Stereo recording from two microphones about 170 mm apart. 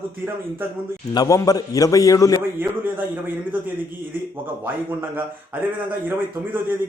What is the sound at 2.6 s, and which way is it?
Speech, 10° right (ahead or behind).